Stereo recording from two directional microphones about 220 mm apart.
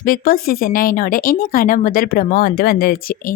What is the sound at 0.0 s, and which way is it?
Speech, 40° left (ahead or behind).